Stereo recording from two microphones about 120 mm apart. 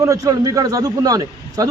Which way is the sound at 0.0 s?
25° right (ahead or behind).